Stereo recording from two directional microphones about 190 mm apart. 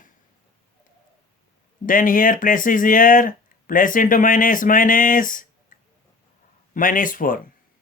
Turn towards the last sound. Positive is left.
turn(degrees=45)  # may be behind; listen again after turning